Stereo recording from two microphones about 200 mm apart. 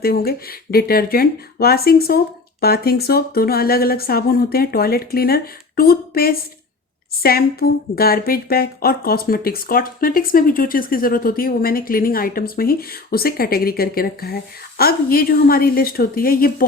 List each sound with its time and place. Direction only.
0.0 s a woman's voice: 50° left (ahead or behind)